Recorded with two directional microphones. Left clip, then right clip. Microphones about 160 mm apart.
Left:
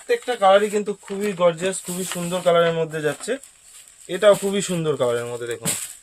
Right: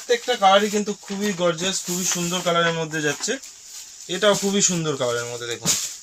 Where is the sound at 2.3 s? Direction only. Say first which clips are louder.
Left 4 dB; 25° left (ahead or behind); by 5.6 s 40° left (ahead or behind).